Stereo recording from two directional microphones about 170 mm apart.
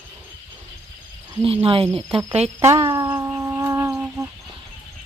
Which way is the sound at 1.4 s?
35° right (ahead or behind).